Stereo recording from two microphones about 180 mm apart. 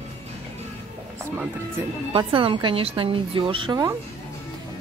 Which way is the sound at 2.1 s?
30° right (ahead or behind).